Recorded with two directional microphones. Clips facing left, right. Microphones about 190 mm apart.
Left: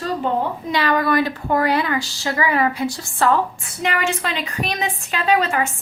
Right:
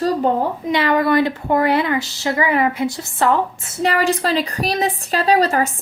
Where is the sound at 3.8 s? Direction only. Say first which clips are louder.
Right 5 dB; 35° right (ahead or behind).